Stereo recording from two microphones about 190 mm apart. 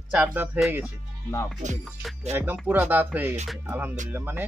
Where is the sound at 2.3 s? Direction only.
10° right (ahead or behind).